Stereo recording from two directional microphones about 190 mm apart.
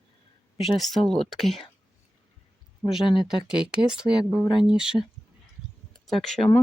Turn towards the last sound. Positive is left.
turn(degrees=5)  # may be behind; listen again after turning